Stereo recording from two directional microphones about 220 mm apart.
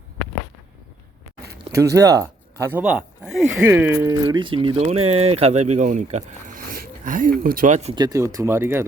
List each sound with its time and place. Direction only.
1.7 s speech: 15° right (ahead or behind)